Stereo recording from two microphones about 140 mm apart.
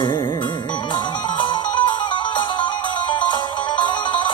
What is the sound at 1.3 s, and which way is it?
Music, 35° left (ahead or behind).